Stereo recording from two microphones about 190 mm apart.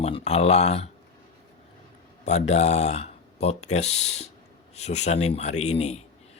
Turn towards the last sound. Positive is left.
turn(degrees=35)  # may be behind; listen again after turning